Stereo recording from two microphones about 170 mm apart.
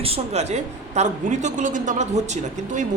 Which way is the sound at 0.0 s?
35° right (ahead or behind).